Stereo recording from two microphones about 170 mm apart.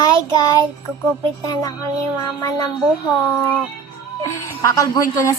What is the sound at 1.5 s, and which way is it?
Speech, 20° left (ahead or behind).